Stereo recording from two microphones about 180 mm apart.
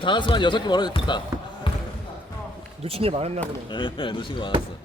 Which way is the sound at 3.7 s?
25° left (ahead or behind).